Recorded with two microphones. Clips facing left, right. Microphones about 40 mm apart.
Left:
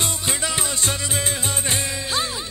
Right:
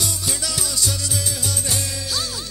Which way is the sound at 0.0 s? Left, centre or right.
Left.